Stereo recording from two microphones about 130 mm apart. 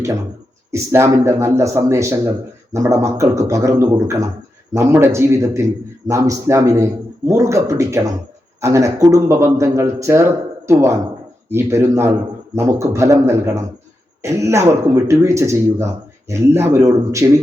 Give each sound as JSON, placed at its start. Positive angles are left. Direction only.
{"t": 0.7, "sound": "a man's voice", "side_deg": -20}